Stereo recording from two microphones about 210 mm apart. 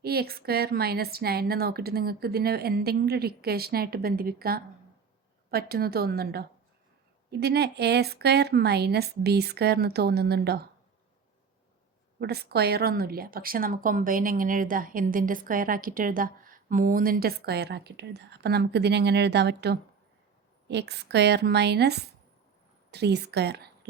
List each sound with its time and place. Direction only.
0.0 s a woman's voice: 45° right (ahead or behind)
12.2 s a woman's voice: 50° right (ahead or behind)